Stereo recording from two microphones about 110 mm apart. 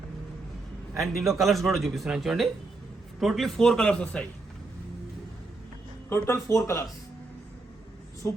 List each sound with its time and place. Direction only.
0.9 s speech: centre (ahead or behind)
6.1 s speech: 25° left (ahead or behind)